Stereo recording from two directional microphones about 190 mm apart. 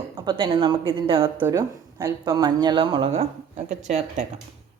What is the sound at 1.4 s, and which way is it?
A woman's voice, 15° right (ahead or behind).